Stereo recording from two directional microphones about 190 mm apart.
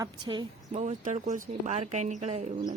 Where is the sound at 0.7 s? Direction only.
40° right (ahead or behind).